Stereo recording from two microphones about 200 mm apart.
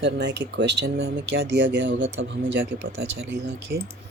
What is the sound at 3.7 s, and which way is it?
Speech, 55° right (ahead or behind).